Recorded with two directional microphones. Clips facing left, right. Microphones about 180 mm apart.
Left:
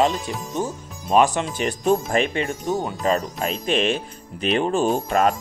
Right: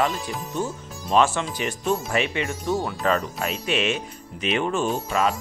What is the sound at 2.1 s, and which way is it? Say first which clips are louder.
Speech: left 3 dB; 35° left (ahead or behind).